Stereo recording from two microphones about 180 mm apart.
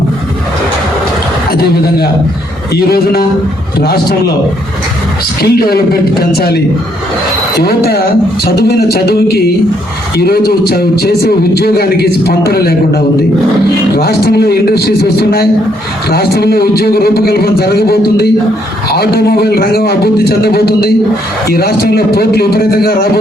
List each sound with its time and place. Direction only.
1.5 s a man's voice: 60° left (ahead or behind)
5.4 s a man's voice: 60° left (ahead or behind)
7.6 s a man's voice: 60° left (ahead or behind)
13.9 s a man's voice: 60° left (ahead or behind)